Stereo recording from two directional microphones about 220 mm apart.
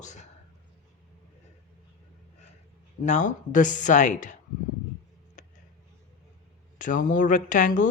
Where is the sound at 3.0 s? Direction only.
35° left (ahead or behind).